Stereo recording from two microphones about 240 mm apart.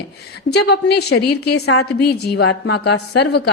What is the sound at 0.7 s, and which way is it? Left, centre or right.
Speech, left.